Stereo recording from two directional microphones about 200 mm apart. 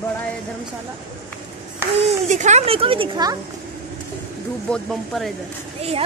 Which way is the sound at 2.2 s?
35° right (ahead or behind).